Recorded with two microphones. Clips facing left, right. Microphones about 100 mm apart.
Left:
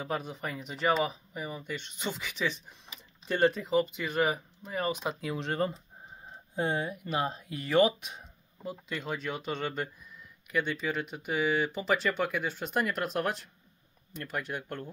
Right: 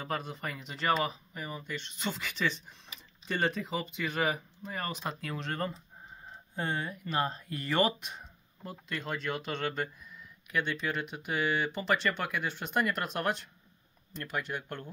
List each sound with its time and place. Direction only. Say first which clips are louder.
0.0 s speech: left 1 dB; 5° left (ahead or behind)
5.4 s speech: left 5 dB; 20° left (ahead or behind); by 14.9 s centre (ahead or behind)